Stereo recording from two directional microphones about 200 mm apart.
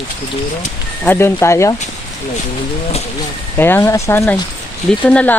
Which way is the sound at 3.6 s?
10° left (ahead or behind).